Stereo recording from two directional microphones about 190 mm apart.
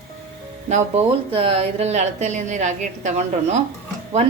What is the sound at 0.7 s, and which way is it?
A woman's voice, 35° right (ahead or behind).